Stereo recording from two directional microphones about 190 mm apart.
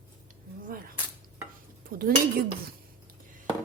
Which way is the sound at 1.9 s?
50° right (ahead or behind).